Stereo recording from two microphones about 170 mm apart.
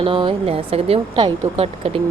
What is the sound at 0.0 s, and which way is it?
A woman's voice, 30° right (ahead or behind).